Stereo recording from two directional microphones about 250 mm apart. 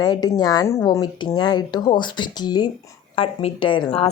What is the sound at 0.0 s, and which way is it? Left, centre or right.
Speech, centre.